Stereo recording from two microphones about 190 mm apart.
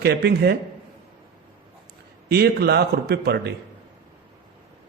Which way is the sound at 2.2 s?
55° right (ahead or behind).